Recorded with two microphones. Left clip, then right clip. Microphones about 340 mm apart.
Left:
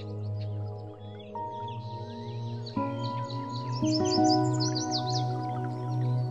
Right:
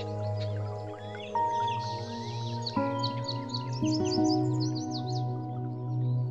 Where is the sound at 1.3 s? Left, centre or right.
Right.